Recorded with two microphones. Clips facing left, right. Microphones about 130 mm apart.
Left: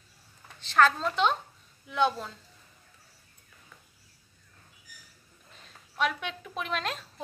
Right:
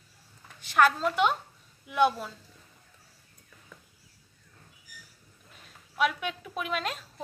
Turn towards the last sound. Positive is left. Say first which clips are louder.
# right 1 dB
turn(degrees=-5)  # may be behind; listen again after turning